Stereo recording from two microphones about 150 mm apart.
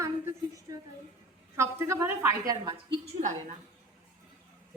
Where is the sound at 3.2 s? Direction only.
55° right (ahead or behind).